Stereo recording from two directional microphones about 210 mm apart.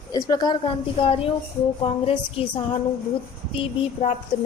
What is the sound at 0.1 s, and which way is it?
A woman's voice, 20° left (ahead or behind).